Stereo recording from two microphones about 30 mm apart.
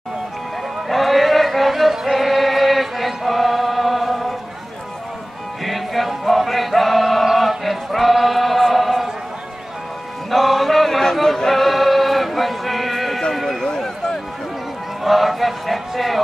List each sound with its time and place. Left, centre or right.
0.8 s music: centre
5.7 s chant: centre
7.3 s choir: centre
10.3 s chant: centre
11.1 s male singing: centre
13.3 s run: centre
13.7 s a sound: left
15.0 s a sound: centre